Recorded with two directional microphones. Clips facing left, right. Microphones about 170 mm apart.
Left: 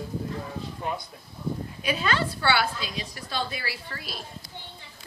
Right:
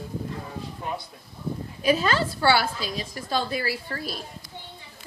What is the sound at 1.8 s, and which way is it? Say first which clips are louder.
A woman's voice: right 6 dB; 40° right (ahead or behind).